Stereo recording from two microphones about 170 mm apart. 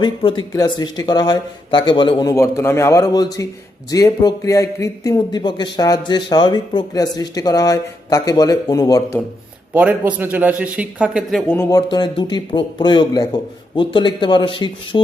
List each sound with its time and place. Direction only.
0.0 s speech: 30° left (ahead or behind)
9.7 s a man's voice: 10° right (ahead or behind)
11.5 s speech: 15° left (ahead or behind)
11.9 s speech: 25° left (ahead or behind)